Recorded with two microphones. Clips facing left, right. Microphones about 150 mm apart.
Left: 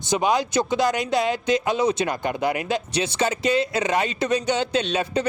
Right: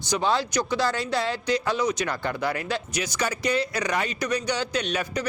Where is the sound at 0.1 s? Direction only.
15° left (ahead or behind).